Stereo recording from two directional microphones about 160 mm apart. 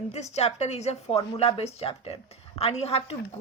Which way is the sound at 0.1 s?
40° left (ahead or behind).